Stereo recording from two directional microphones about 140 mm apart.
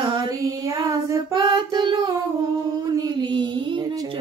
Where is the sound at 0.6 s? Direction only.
25° right (ahead or behind).